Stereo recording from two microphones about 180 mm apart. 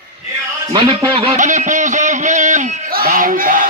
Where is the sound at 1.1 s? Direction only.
35° right (ahead or behind).